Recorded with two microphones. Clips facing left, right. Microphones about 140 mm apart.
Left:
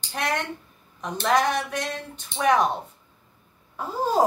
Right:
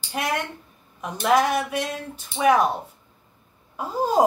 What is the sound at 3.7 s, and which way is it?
Speech, 15° right (ahead or behind).